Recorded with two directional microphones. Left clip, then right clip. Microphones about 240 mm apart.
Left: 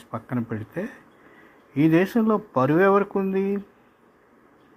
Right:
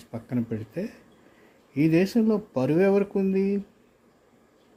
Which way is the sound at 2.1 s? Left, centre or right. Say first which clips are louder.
Left 3 dB; centre.